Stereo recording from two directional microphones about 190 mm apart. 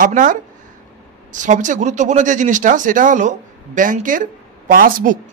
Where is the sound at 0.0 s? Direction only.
45° right (ahead or behind).